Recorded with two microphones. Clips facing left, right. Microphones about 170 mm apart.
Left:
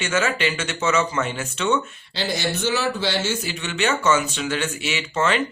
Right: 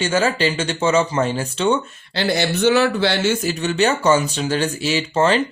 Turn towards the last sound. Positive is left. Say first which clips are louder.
# right 5 dB
turn(degrees=-35)  # may be behind; listen again after turning